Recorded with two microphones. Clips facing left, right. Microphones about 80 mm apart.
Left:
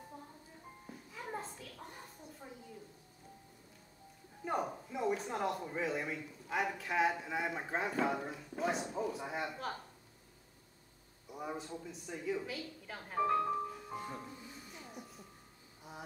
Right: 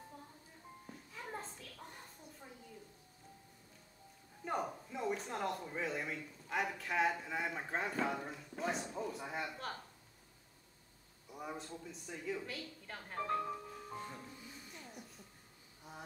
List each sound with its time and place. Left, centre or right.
1.1 s a sound: centre
4.5 s speech: centre
11.2 s speech: centre
13.5 s music: centre
14.5 s music: centre
15.9 s a sound: centre